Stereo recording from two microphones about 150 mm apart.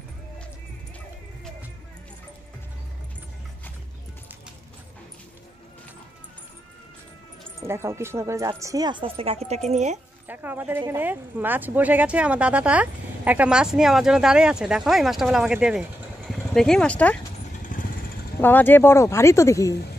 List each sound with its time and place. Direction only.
7.6 s speech: 15° right (ahead or behind); by 9.9 s 50° right (ahead or behind)
10.2 s speech: 10° right (ahead or behind); by 17.2 s 10° left (ahead or behind)
18.4 s speech: 15° left (ahead or behind)